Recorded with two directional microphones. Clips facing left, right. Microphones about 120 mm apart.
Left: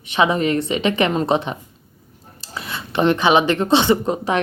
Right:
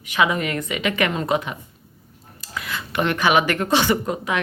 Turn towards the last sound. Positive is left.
turn(degrees=30)  # may be behind; listen again after turning